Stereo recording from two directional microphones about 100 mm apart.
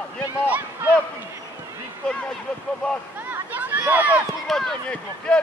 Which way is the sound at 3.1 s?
15° right (ahead or behind).